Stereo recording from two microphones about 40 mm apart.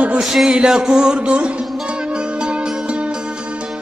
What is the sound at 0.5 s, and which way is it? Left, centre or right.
Music, centre.